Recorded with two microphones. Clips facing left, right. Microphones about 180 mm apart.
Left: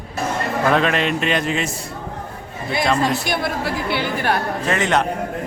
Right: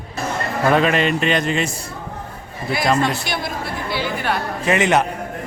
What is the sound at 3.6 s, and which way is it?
Speech, 65° left (ahead or behind).